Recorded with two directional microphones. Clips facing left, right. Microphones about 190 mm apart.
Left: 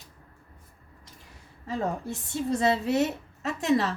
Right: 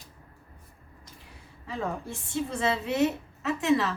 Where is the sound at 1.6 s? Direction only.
40° left (ahead or behind).